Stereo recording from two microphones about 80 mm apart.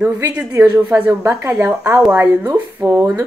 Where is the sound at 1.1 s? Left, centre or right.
Right.